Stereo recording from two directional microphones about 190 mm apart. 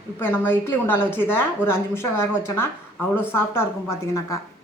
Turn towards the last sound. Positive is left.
turn(degrees=15)  # may be behind; listen again after turning